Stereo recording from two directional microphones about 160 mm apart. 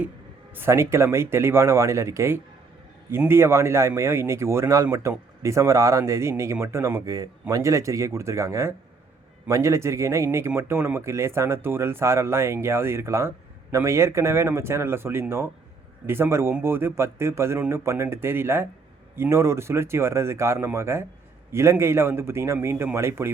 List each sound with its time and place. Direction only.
0.5 s a man's voice: 15° right (ahead or behind)